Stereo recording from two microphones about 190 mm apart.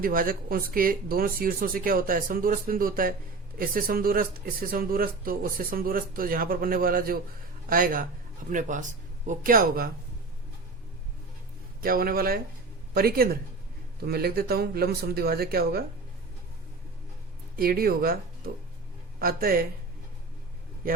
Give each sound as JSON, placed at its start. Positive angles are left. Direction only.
{"t": 0.0, "sound": "speech", "side_deg": -50}
{"t": 11.8, "sound": "speech", "side_deg": -50}
{"t": 17.6, "sound": "speech", "side_deg": -55}